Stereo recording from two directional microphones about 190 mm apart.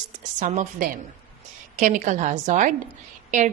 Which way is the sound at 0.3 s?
40° right (ahead or behind).